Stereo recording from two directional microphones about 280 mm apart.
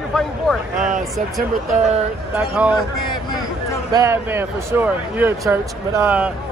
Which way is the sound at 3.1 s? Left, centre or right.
Centre.